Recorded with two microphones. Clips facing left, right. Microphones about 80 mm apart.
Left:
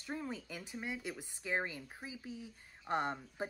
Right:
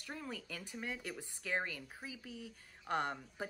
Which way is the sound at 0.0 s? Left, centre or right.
Left.